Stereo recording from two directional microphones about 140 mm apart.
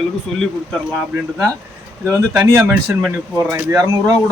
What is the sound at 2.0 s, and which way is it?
Speech, 15° right (ahead or behind).